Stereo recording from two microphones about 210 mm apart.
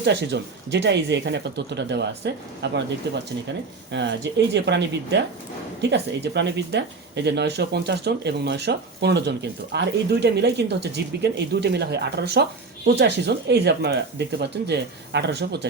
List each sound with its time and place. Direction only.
0.0 s speech: 55° right (ahead or behind)
3.9 s speech: 55° right (ahead or behind)